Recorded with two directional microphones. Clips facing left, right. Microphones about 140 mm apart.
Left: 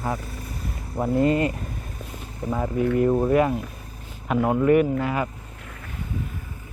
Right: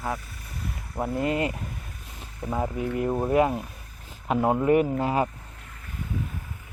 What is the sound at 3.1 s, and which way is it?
Speech, 15° right (ahead or behind).